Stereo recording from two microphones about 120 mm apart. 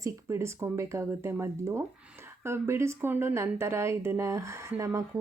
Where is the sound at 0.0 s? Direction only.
25° right (ahead or behind).